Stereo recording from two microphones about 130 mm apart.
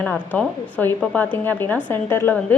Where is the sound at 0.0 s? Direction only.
10° left (ahead or behind).